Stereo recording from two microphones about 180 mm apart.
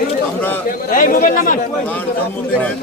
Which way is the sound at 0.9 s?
50° left (ahead or behind).